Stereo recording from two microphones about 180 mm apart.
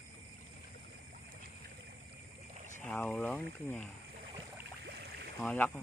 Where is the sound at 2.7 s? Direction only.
5° left (ahead or behind).